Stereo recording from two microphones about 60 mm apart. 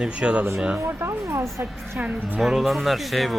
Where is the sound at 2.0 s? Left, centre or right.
Right.